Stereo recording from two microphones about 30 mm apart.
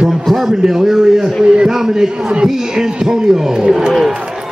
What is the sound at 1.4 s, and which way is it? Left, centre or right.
Speech, right.